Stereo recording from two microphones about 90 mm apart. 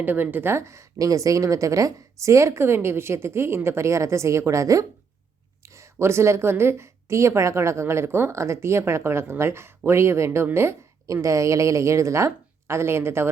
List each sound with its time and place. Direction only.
0.0 s a woman's voice: 20° right (ahead or behind)